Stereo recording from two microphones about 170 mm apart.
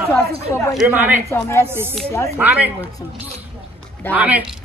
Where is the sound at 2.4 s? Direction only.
10° right (ahead or behind).